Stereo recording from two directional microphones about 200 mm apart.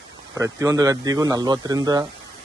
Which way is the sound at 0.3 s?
15° right (ahead or behind).